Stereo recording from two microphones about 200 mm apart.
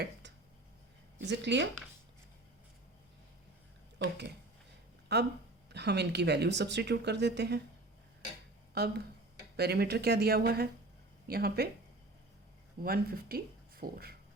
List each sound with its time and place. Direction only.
0.0 s a sound: 60° right (ahead or behind)
1.2 s speech: 60° right (ahead or behind)
3.9 s speech: 60° right (ahead or behind)
8.8 s speech: 50° right (ahead or behind)
12.8 s speech: 50° right (ahead or behind)